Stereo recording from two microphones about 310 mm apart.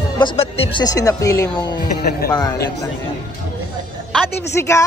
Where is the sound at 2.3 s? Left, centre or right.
Centre.